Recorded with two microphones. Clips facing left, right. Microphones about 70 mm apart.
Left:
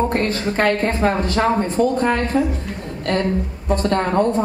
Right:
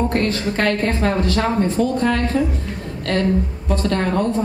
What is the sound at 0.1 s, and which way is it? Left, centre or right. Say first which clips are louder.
Speech: even; left.